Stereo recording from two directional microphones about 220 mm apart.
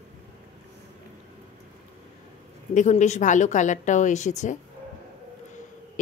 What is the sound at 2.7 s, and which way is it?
A woman's voice, 35° left (ahead or behind).